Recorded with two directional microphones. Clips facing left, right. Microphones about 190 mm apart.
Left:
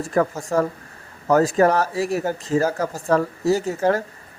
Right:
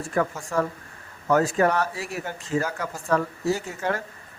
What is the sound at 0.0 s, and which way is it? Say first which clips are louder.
Speech: left 5 dB; 40° left (ahead or behind).